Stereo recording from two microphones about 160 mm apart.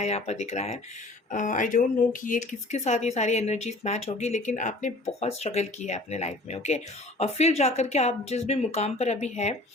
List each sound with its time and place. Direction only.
0.0 s speech: 45° left (ahead or behind)